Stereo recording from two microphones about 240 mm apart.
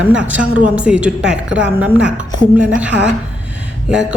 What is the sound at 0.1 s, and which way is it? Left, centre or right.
A woman's voice, centre.